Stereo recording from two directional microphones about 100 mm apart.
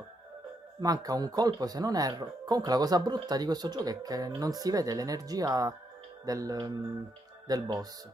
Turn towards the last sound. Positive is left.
turn(degrees=-40)  # may be behind; listen again after turning